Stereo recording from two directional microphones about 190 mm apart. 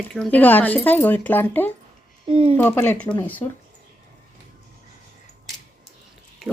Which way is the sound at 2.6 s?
10° left (ahead or behind).